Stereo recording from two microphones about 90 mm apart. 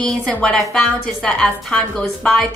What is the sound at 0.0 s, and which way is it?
A woman's voice, 10° left (ahead or behind).